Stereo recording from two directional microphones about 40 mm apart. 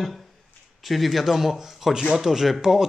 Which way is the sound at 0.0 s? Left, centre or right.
Centre.